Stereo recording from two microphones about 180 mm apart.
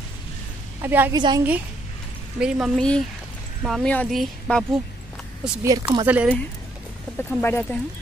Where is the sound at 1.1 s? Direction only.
25° right (ahead or behind).